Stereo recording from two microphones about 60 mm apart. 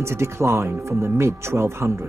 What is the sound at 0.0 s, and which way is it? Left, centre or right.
Speech, right.